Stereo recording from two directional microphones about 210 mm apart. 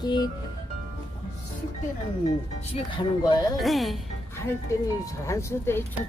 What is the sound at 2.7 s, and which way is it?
Speech, 20° left (ahead or behind).